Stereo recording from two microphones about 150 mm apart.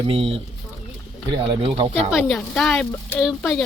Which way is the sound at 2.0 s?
Centre (ahead or behind).